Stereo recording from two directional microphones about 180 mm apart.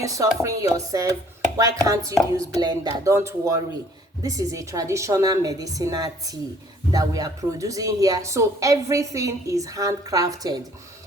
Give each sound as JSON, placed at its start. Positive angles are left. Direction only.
{"t": 0.0, "sound": "speech", "side_deg": -20}